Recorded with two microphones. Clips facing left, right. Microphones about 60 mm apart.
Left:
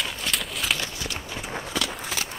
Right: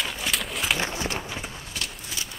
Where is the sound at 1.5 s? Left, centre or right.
Left.